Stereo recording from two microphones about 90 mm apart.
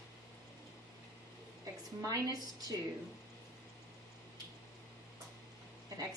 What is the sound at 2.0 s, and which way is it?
Speech, 45° right (ahead or behind).